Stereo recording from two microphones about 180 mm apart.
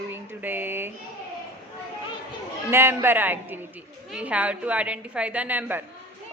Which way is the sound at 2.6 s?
15° right (ahead or behind).